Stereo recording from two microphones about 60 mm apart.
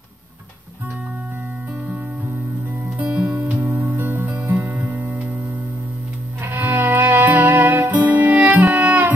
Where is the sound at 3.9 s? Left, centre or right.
Right.